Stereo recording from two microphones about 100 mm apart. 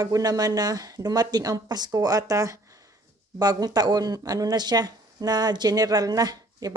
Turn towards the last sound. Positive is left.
turn(degrees=-40)  # may be behind; listen again after turning